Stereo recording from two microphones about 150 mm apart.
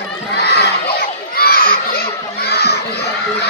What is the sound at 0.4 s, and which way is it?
Crowd, 90° left.